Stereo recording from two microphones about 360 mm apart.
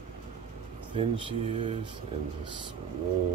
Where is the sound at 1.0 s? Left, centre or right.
Centre.